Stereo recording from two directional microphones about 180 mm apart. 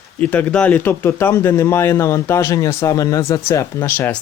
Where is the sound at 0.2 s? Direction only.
10° left (ahead or behind).